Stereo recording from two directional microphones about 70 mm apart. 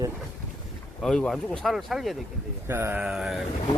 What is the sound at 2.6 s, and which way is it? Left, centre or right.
Speech, right.